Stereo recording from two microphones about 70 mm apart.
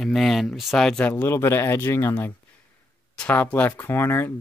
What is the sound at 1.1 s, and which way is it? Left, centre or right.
Speech, left.